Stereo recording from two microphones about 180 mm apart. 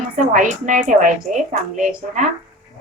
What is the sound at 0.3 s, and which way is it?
A woman's voice, 45° right (ahead or behind).